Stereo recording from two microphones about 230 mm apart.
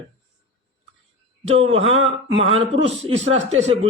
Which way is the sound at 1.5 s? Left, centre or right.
Right.